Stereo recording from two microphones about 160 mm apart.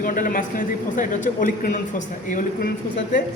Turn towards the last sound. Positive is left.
turn(degrees=55)  # may be behind; listen again after turning